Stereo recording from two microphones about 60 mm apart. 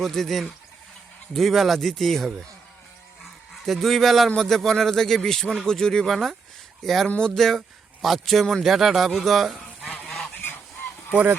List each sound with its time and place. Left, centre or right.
0.0 s speech: centre
3.5 s a man's voice: centre
10.3 s goose: left